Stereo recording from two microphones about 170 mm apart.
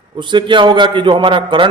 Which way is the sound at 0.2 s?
30° right (ahead or behind).